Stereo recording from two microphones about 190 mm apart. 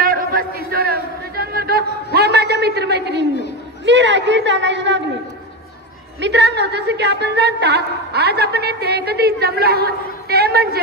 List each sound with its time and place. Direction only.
0.0 s a sound: 50° right (ahead or behind)
3.8 s a man's voice: 70° right (ahead or behind)
6.2 s a woman's voice: 65° right (ahead or behind)